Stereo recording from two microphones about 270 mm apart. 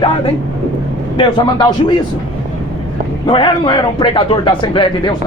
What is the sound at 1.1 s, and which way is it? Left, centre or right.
Speech, centre.